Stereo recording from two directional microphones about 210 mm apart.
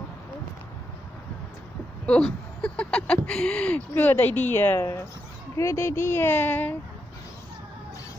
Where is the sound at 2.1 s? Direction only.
5° left (ahead or behind).